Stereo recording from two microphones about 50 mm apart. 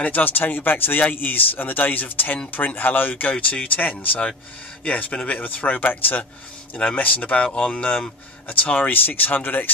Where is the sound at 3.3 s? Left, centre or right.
Left.